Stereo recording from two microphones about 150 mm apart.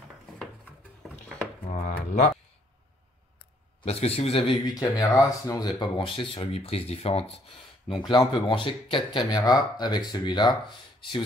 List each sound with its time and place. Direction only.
1.0 s drawer open or close: centre (ahead or behind)
1.7 s a sound: 55° left (ahead or behind)
3.8 s a man's voice: 45° left (ahead or behind)
4.7 s speech: 25° left (ahead or behind)
5.8 s speech: 35° left (ahead or behind)